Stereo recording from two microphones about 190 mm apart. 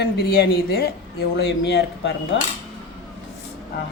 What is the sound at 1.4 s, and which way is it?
Speech, 65° left (ahead or behind).